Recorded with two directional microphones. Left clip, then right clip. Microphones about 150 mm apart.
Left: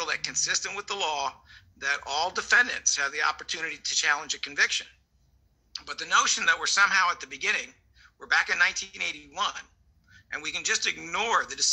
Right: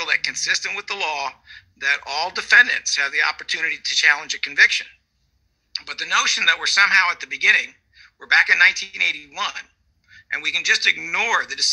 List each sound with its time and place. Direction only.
0.0 s a man's voice: 15° right (ahead or behind)